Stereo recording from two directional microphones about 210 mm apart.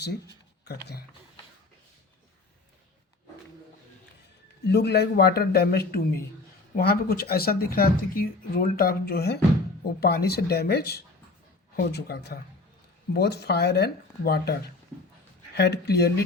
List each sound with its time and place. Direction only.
0.6 s speech: 50° left (ahead or behind)
4.7 s speech: 50° left (ahead or behind)